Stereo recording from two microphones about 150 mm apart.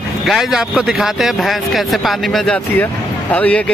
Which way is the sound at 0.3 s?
5° right (ahead or behind).